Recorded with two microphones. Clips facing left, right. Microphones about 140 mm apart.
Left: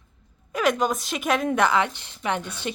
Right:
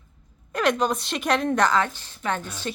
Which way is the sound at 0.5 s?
5° left (ahead or behind).